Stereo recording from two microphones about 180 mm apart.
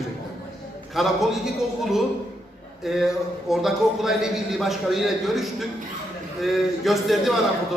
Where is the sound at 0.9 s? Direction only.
Centre (ahead or behind).